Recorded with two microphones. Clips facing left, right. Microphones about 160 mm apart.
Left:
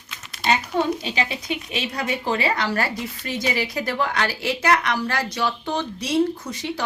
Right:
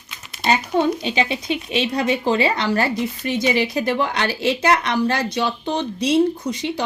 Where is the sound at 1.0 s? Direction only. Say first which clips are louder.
Right 5 dB; 25° right (ahead or behind).